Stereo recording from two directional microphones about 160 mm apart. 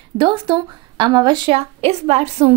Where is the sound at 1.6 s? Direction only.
40° right (ahead or behind).